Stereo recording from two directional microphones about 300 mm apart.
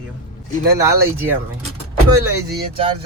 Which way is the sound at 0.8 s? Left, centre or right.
Centre.